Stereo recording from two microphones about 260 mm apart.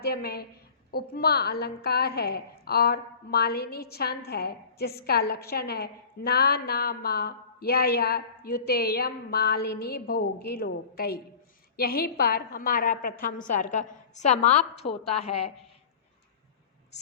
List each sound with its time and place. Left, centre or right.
0.0 s a woman's voice: left